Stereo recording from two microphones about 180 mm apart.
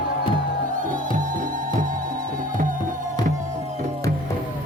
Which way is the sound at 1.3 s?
50° right (ahead or behind).